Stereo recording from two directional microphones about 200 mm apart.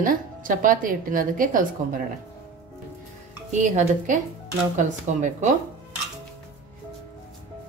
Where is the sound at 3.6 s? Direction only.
40° right (ahead or behind).